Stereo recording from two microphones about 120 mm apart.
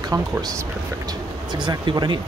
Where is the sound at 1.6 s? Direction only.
40° right (ahead or behind).